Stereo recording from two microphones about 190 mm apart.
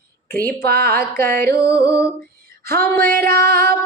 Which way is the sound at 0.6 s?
55° right (ahead or behind).